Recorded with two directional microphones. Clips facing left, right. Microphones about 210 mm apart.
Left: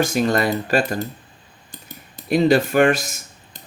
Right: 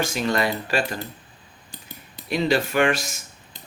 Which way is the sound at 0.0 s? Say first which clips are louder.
Left 5 dB; 45° left (ahead or behind).